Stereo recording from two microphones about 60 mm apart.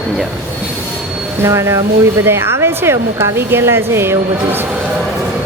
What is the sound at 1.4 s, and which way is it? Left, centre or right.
Speech, right.